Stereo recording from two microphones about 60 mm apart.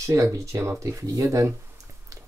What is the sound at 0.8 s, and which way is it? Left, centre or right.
Speech, right.